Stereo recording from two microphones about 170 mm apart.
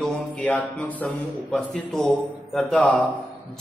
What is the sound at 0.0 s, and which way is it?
A man's voice, 5° left (ahead or behind).